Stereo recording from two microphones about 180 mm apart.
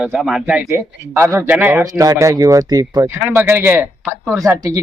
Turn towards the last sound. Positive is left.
turn(degrees=-20)  # may be behind; listen again after turning